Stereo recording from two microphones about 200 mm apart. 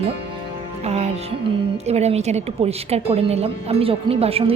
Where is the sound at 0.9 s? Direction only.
30° right (ahead or behind).